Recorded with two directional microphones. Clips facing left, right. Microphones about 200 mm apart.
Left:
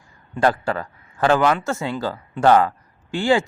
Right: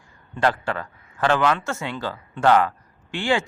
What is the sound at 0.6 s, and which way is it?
A man's voice, 35° left (ahead or behind).